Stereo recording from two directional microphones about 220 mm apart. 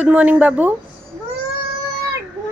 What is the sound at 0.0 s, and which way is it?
Speech, 5° right (ahead or behind).